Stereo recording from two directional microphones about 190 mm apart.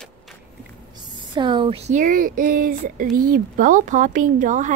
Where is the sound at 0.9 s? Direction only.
20° right (ahead or behind).